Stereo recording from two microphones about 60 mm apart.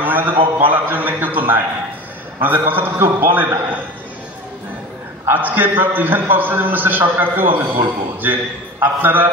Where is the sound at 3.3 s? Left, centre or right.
Right.